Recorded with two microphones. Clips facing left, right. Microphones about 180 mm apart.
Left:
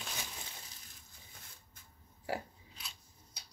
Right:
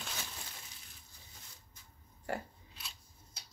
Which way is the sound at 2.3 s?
Centre (ahead or behind).